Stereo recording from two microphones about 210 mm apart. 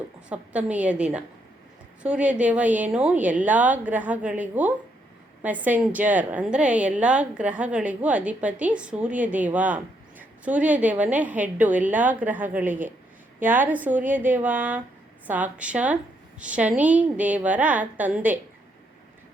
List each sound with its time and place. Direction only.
0.3 s a woman's voice: 5° right (ahead or behind)